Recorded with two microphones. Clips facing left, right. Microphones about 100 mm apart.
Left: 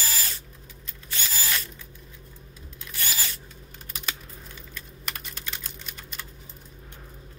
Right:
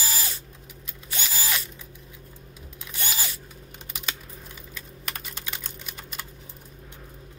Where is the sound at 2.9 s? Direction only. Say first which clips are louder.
Right 1 dB; 20° right (ahead or behind).